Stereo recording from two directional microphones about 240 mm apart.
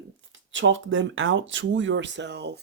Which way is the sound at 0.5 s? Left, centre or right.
Right.